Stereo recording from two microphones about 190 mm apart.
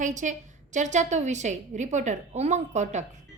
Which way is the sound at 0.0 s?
40° right (ahead or behind).